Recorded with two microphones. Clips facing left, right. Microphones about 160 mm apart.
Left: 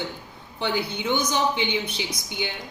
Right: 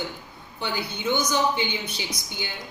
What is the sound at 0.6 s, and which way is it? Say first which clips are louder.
Speech: left 4 dB; 20° left (ahead or behind).